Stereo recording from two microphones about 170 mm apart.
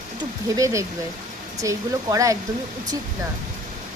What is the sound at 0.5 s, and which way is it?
A woman's voice, 20° right (ahead or behind).